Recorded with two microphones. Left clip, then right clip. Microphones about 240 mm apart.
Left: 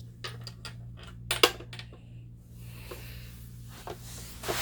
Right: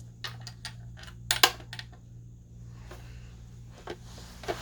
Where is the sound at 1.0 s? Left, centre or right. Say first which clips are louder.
Right 1 dB; centre.